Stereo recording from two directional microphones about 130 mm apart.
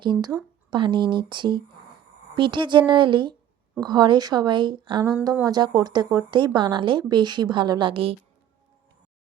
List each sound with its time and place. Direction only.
0.0 s a woman's voice: 35° right (ahead or behind)